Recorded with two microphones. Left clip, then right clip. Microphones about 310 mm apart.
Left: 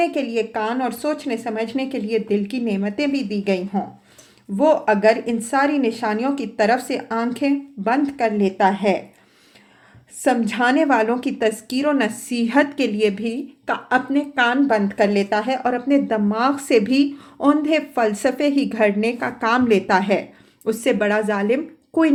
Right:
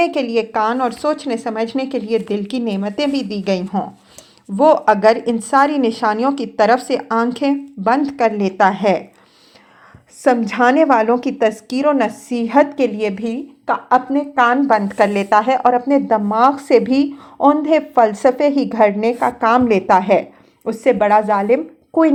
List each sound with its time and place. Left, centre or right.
0.0 s speech: centre
10.2 s a woman's voice: centre